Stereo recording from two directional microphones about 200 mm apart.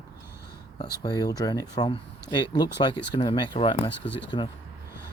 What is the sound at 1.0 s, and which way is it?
Speech, 20° left (ahead or behind).